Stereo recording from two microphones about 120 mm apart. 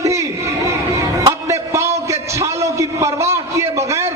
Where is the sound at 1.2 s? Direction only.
25° right (ahead or behind).